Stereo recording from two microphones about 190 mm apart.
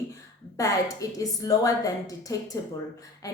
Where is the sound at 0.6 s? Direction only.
20° left (ahead or behind).